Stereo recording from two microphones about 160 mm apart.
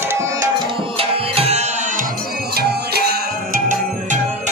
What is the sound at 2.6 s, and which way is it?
Music, 80° right.